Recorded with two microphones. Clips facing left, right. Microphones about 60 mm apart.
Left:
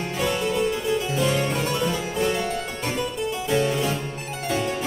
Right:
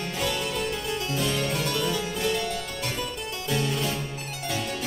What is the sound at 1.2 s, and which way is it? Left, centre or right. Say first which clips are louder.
Harpsichord: left 4 dB; left.